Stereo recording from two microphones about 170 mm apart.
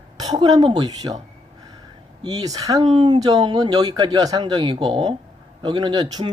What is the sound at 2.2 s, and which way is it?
Speech, 20° right (ahead or behind).